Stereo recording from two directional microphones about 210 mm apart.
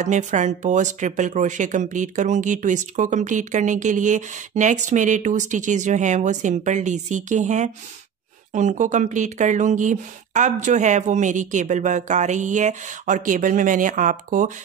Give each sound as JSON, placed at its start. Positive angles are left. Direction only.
{"t": 0.0, "sound": "speech", "side_deg": -35}